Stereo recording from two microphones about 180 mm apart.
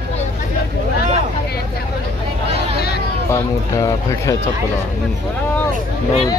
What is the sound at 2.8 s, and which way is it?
Hubbub, 60° left (ahead or behind).